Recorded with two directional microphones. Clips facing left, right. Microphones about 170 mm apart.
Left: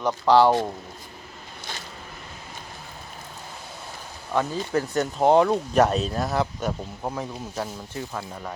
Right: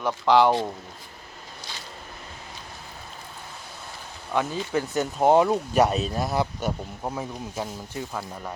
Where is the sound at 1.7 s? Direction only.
50° left (ahead or behind).